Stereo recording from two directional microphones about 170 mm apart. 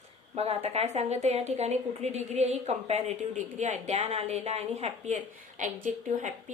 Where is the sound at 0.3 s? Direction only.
40° right (ahead or behind).